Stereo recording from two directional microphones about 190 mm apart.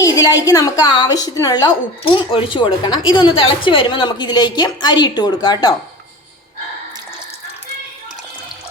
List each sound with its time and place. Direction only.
0.0 s a woman's voice: 15° left (ahead or behind)